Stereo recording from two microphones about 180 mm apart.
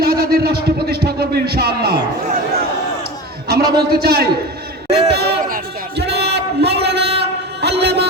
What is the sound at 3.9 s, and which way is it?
Speech, 60° right (ahead or behind).